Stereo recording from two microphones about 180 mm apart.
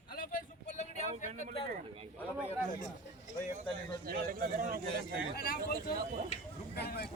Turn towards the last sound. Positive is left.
turn(degrees=65)  # may be behind; listen again after turning